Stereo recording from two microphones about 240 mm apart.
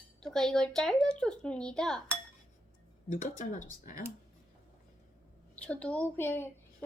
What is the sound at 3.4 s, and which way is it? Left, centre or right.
Speech, left.